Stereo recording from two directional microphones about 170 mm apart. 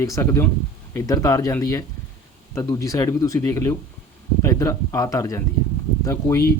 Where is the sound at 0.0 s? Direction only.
20° left (ahead or behind).